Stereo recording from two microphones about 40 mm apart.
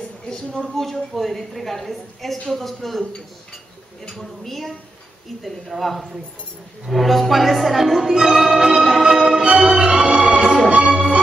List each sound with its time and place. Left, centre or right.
0.3 s speech: centre
0.7 s a woman's voice: centre
4.2 s a woman's voice: centre
9.8 s organ: right
10.8 s music: right